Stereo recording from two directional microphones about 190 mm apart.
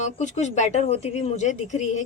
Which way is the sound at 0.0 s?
40° left (ahead or behind).